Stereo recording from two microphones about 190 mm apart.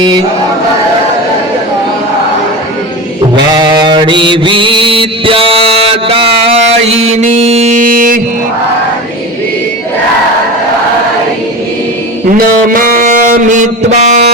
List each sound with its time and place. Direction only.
3.5 s mantra: 20° right (ahead or behind); by 8.2 s 45° right (ahead or behind)
12.3 s music: 45° right (ahead or behind)